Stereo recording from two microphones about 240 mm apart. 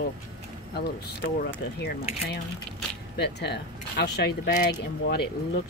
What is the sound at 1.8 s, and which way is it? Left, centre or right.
Speech, left.